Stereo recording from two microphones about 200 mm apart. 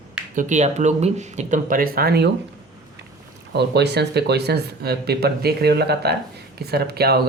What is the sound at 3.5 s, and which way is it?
Speech, 55° right (ahead or behind).